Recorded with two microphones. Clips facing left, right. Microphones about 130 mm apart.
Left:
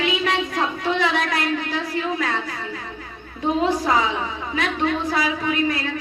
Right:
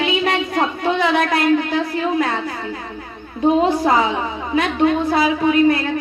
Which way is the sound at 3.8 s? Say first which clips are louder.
Right 4 dB; 35° right (ahead or behind).